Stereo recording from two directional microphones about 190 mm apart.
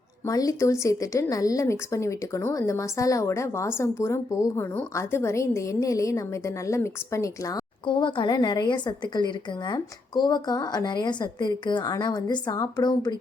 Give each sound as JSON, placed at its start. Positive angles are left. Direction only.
{"t": 0.3, "sound": "speech", "side_deg": 20}